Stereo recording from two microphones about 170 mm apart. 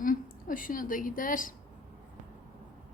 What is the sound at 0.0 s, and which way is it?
A woman's voice, 55° left (ahead or behind).